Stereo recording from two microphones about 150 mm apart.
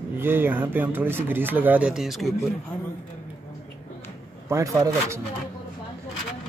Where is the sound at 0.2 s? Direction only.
15° right (ahead or behind).